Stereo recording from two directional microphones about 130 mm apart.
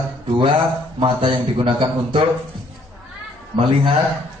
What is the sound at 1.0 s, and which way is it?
A man's voice, 40° right (ahead or behind).